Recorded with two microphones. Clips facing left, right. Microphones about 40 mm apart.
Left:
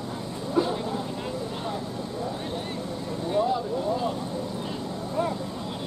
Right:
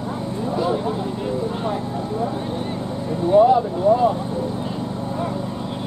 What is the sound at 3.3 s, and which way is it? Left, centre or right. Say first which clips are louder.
Speech: right 11 dB; right.